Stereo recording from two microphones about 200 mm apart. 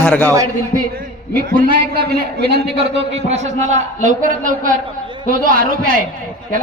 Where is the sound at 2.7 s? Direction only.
30° right (ahead or behind).